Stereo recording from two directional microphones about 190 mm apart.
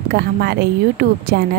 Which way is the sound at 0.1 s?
55° right (ahead or behind).